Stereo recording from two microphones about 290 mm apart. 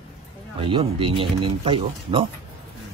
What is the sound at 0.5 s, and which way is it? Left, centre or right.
A man's voice, centre.